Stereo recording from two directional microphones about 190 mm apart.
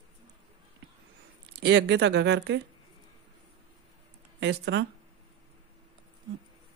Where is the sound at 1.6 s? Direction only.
65° right (ahead or behind).